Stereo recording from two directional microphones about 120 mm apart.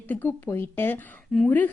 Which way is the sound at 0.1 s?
15° left (ahead or behind).